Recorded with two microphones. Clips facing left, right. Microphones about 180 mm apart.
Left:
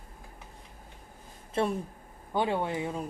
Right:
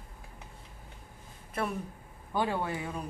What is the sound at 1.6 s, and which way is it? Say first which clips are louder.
A man's voice: left 5 dB; 25° left (ahead or behind).